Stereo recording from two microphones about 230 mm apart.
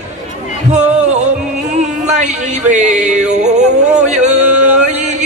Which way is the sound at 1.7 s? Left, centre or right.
Right.